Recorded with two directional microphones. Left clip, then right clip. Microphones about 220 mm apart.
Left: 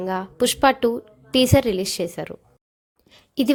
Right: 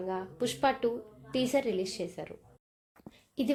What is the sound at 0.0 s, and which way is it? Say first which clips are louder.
A woman's voice: left 11 dB; 35° left (ahead or behind).